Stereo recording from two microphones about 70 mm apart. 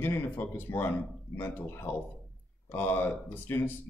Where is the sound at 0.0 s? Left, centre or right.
Left.